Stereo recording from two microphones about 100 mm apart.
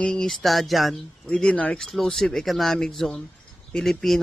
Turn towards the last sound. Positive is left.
turn(degrees=5)  # may be behind; listen again after turning